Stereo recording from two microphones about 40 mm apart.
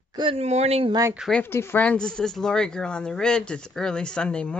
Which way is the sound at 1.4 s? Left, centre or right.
Left.